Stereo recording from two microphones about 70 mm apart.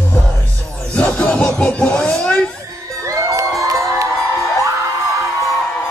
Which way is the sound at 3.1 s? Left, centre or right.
Right.